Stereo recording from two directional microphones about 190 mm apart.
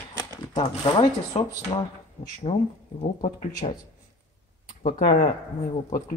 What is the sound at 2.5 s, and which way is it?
Speech, 40° left (ahead or behind).